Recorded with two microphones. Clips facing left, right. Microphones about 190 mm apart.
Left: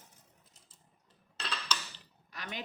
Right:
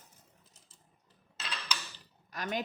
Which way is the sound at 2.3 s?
45° right (ahead or behind).